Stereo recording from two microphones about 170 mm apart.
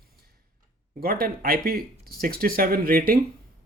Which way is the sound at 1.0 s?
60° right (ahead or behind).